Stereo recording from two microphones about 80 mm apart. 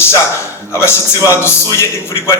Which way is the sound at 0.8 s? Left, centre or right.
Left.